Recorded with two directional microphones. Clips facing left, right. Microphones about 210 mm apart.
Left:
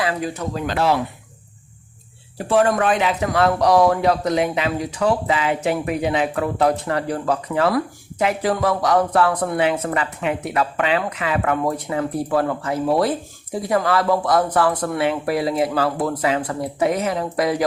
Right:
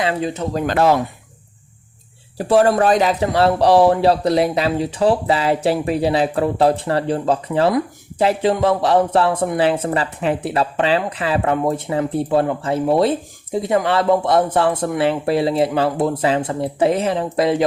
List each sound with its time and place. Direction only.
0.0 s speech: 25° right (ahead or behind)
0.5 s speech: 45° right (ahead or behind)
2.4 s speech: 35° right (ahead or behind)